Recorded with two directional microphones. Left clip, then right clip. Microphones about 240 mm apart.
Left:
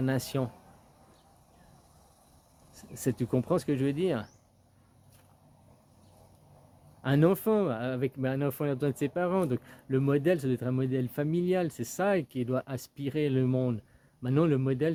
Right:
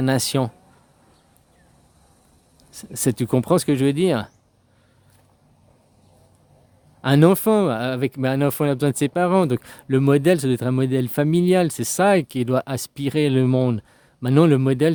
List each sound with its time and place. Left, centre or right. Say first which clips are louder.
0.0 s speech: right 10 dB; right
2.7 s speech: right 9 dB; right
7.0 s speech: right 10 dB; right